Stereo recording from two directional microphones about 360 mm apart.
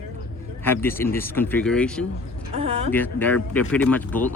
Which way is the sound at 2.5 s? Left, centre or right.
Centre.